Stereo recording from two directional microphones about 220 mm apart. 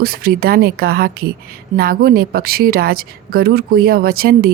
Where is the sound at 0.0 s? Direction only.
45° right (ahead or behind).